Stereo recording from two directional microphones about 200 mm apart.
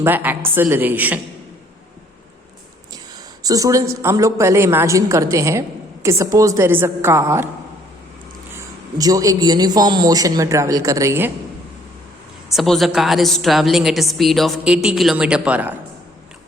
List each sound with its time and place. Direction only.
0.0 s a woman's voice: 10° right (ahead or behind)
3.4 s a woman's voice: 15° right (ahead or behind)
8.5 s a woman's voice: 20° right (ahead or behind)
12.5 s a woman's voice: centre (ahead or behind)